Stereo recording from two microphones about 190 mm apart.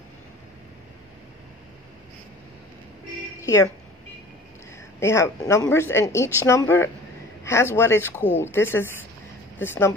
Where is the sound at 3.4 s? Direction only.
15° left (ahead or behind).